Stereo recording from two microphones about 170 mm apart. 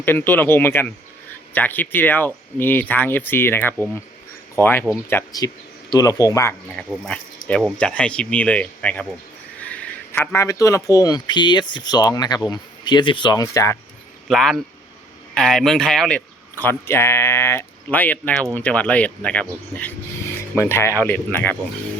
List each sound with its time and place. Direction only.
0.0 s speech: 10° left (ahead or behind)
6.7 s a man's voice: 5° left (ahead or behind)
14.3 s speech: centre (ahead or behind)